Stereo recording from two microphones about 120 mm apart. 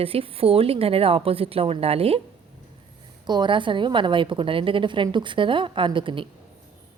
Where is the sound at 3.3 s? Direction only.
40° right (ahead or behind).